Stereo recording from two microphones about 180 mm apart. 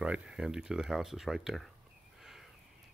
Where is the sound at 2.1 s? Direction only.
Centre (ahead or behind).